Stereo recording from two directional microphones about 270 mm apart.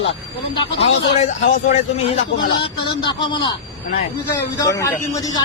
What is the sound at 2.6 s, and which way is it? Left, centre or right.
Speech, centre.